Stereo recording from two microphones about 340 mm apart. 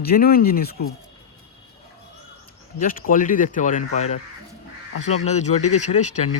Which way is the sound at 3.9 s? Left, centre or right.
Left.